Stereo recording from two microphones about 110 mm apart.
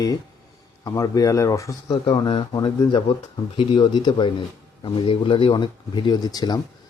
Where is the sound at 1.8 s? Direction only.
40° left (ahead or behind).